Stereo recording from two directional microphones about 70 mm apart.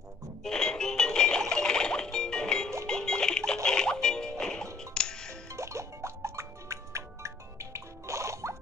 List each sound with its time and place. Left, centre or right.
0.4 s music: centre
5.5 s music: right